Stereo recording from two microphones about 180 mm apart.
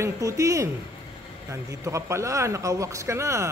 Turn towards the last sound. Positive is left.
turn(degrees=-15)  # may be behind; listen again after turning